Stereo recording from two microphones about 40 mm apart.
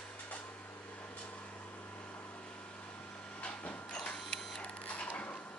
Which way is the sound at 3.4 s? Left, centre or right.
Left.